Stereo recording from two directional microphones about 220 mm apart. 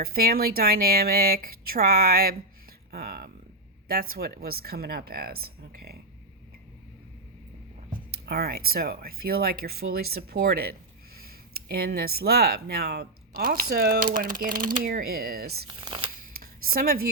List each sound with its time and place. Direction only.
0.0 s speech: 45° right (ahead or behind)
8.1 s speech: 45° right (ahead or behind)
15.6 s speech: 20° right (ahead or behind)
16.6 s speech: 40° right (ahead or behind)